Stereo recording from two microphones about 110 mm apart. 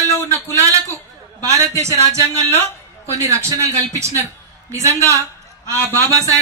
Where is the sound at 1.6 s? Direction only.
25° right (ahead or behind).